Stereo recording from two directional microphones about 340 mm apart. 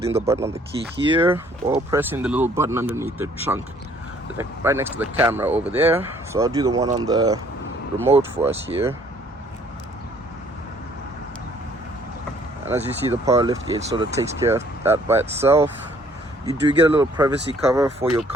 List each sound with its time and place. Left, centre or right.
0.0 s speech: centre
8.4 s speech: centre
12.8 s speech: centre